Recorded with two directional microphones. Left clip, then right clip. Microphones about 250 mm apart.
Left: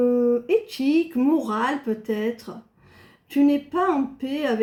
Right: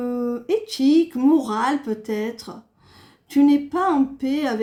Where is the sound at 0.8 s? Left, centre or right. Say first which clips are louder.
Right 4 dB; right.